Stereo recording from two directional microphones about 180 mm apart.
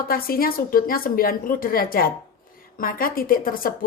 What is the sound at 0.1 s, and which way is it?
A woman's voice, 55° left (ahead or behind).